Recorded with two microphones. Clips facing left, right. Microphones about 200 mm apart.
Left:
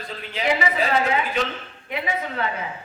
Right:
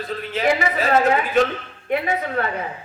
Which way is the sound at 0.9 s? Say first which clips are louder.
Right 5 dB; 50° right (ahead or behind).